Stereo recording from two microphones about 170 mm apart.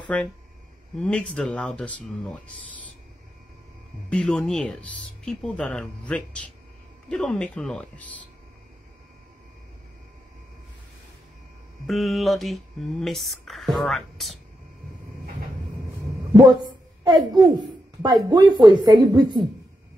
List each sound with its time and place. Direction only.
0.1 s speech: 5° left (ahead or behind)
4.1 s speech: 5° left (ahead or behind)
11.9 s speech: centre (ahead or behind)
16.3 s a woman's voice: 25° right (ahead or behind)